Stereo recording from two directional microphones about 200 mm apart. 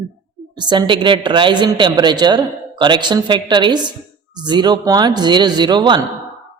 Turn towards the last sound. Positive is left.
turn(degrees=-20)  # may be behind; listen again after turning